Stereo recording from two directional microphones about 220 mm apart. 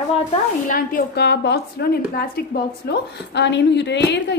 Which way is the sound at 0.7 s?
40° left (ahead or behind).